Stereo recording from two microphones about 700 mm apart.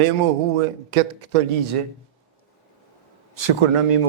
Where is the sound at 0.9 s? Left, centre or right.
Right.